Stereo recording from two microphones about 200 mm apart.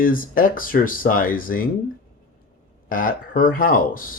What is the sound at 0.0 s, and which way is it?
Speech, 45° left (ahead or behind).